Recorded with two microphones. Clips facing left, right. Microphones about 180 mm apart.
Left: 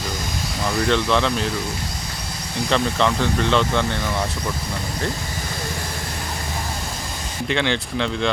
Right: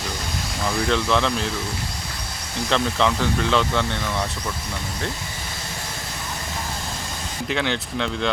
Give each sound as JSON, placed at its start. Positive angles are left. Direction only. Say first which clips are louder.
{"t": 0.8, "sound": "speech", "louder": "left 2 dB", "side_deg": 0}
{"t": 2.6, "sound": "speech", "louder": "left 1 dB", "side_deg": 0}
{"t": 7.4, "sound": "speech", "louder": "left 3 dB", "side_deg": 0}